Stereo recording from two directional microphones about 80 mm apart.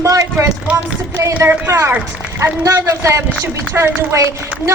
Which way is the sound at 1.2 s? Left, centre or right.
Right.